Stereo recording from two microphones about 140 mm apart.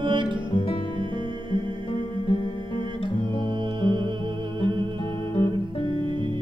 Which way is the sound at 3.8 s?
35° right (ahead or behind).